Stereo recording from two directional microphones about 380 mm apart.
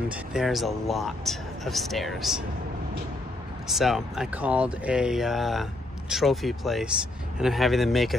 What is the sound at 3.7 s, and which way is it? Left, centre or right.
Speech, centre.